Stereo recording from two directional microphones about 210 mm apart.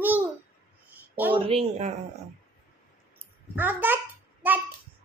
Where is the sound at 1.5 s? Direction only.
30° right (ahead or behind).